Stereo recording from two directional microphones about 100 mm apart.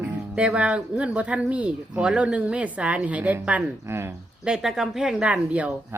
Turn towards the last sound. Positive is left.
turn(degrees=-10)  # may be behind; listen again after turning